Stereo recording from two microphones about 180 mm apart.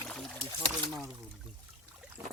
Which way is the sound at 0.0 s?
Centre (ahead or behind).